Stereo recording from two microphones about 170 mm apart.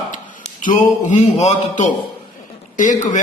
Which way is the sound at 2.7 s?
50° left (ahead or behind).